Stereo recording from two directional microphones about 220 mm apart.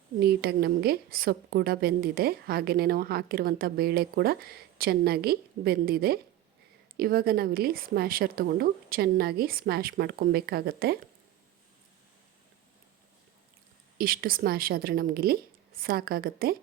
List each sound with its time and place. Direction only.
0.2 s a woman's voice: 45° right (ahead or behind)
14.0 s a woman's voice: 40° right (ahead or behind)